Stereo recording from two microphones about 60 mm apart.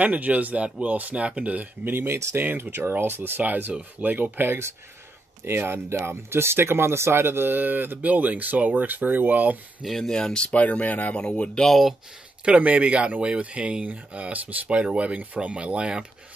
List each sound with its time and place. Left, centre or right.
0.0 s speech: right
1.9 s speech: right
5.5 s speech: right
9.8 s speech: centre; by 11.2 s left
11.2 s speech: centre
12.4 s speech: right